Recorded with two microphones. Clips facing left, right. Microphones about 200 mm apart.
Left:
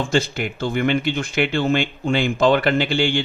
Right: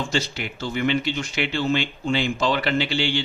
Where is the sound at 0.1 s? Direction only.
50° left (ahead or behind).